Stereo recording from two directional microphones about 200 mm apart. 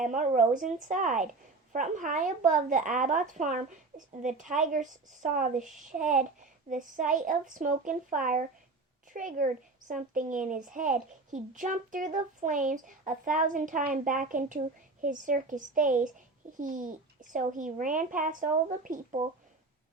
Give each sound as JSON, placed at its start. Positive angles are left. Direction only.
{"t": 0.0, "sound": "a child's voice", "side_deg": -40}